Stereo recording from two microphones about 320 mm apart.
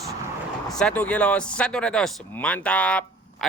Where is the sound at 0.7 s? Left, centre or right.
Centre.